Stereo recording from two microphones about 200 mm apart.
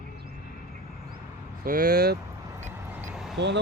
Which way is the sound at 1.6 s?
45° right (ahead or behind).